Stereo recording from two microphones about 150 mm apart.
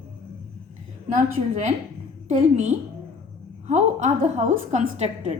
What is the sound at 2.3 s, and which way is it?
A woman's voice, 55° right (ahead or behind).